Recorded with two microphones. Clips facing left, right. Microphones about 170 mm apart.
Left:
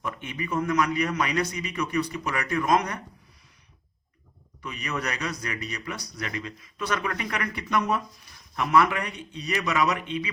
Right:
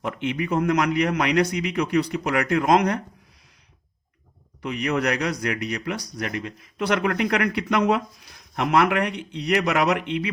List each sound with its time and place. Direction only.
0.0 s speech: 75° right (ahead or behind)
4.6 s speech: 65° right (ahead or behind)